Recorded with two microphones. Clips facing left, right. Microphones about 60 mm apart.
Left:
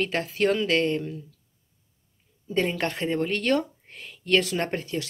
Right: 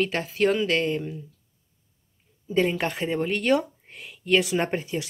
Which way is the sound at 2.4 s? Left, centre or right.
Centre.